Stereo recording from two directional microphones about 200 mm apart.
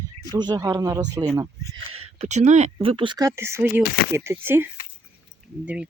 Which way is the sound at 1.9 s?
30° right (ahead or behind).